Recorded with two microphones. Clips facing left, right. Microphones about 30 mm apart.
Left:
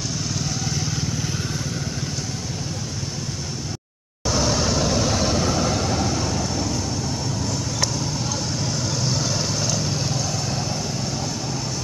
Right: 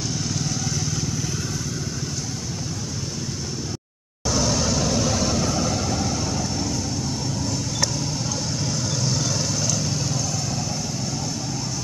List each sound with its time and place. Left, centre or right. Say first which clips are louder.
4.3 s vehicle: left 1 dB; centre
8.9 s vehicle: left 1 dB; centre